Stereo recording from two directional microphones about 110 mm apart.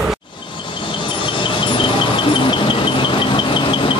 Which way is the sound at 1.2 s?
50° left (ahead or behind).